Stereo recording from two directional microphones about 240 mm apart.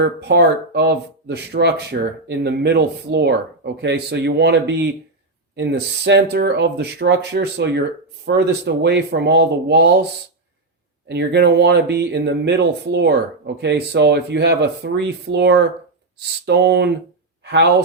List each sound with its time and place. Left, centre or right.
0.0 s speech: right
11.1 s speech: right